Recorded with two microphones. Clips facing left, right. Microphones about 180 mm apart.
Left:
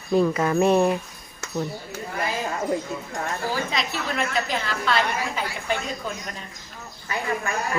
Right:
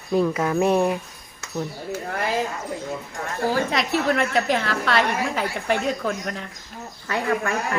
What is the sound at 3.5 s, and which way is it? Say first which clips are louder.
A woman's voice: right 5 dB; 60° right (ahead or behind).